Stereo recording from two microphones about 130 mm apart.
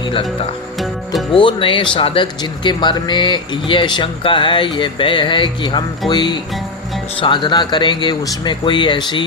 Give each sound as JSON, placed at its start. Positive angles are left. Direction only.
{"t": 0.0, "sound": "speech", "side_deg": 40}
{"t": 1.3, "sound": "speech", "side_deg": 40}